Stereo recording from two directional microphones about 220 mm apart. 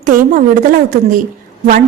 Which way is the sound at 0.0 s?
40° right (ahead or behind).